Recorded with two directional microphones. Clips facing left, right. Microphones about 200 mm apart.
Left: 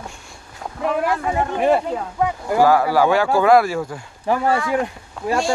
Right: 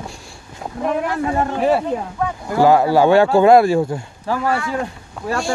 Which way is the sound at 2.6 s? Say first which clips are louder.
Right 4 dB; 25° right (ahead or behind).